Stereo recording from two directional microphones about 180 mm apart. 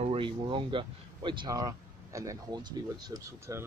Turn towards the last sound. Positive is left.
turn(degrees=-20)  # may be behind; listen again after turning